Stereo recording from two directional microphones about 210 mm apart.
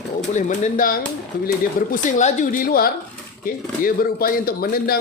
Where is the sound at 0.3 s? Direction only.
35° left (ahead or behind).